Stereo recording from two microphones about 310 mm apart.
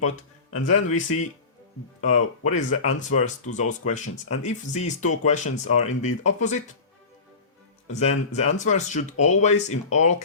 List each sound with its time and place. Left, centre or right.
0.6 s speech: left
7.9 s speech: left